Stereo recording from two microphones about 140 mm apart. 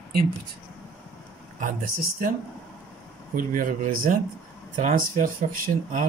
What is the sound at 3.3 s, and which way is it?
Speech, 70° right (ahead or behind).